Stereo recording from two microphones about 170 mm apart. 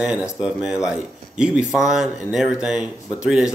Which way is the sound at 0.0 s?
5° right (ahead or behind).